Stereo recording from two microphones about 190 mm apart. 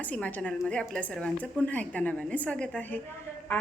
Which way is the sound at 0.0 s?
10° left (ahead or behind).